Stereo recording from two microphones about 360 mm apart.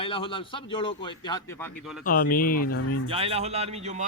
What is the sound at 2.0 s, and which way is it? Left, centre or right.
Speech, left.